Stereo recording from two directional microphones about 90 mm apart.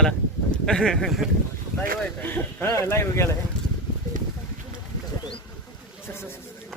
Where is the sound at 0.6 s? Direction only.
5° left (ahead or behind).